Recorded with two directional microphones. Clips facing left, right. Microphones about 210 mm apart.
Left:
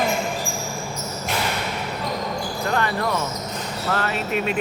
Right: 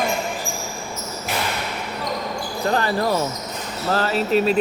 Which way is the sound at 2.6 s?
30° right (ahead or behind).